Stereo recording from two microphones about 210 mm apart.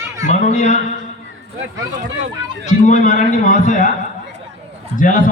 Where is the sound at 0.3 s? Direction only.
35° left (ahead or behind).